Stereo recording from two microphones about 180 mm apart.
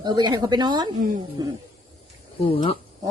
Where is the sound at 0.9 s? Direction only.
45° right (ahead or behind).